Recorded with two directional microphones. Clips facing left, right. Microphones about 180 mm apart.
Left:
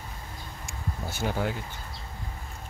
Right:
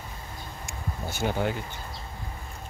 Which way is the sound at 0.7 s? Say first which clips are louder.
Even; centre (ahead or behind).